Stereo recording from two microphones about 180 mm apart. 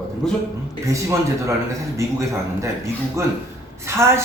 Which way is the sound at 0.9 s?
15° right (ahead or behind).